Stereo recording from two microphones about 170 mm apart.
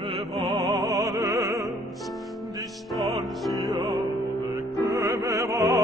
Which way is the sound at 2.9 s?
Centre (ahead or behind).